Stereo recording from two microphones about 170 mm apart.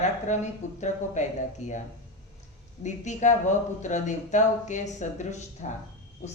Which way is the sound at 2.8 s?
45° left (ahead or behind).